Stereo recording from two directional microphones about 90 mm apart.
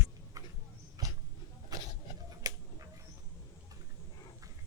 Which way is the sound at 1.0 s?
45° right (ahead or behind).